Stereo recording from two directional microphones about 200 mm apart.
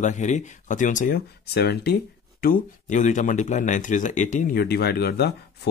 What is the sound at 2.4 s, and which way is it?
Speech, 40° left (ahead or behind).